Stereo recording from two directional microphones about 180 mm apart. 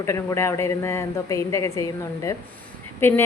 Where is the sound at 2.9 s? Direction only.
15° left (ahead or behind).